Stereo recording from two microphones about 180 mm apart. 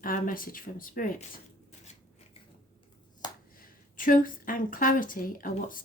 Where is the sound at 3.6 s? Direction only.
50° left (ahead or behind).